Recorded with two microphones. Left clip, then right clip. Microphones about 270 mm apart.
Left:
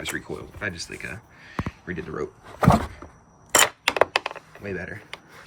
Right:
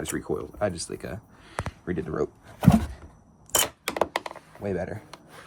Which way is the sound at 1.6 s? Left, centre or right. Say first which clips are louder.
Right 1 dB; right.